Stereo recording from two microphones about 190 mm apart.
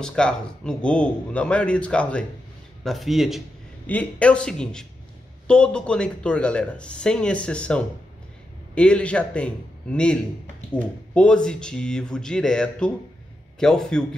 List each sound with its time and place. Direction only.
0.0 s a man's voice: 5° left (ahead or behind)